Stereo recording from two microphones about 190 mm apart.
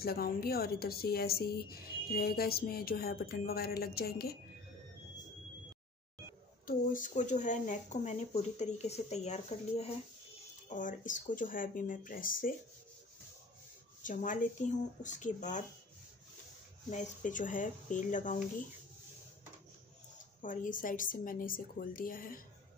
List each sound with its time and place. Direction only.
0.0 s a woman's voice: 55° left (ahead or behind)
6.6 s a woman's voice: 45° left (ahead or behind)
14.0 s speech: 45° left (ahead or behind)
16.9 s speech: 40° left (ahead or behind)
20.4 s a woman's voice: 45° left (ahead or behind)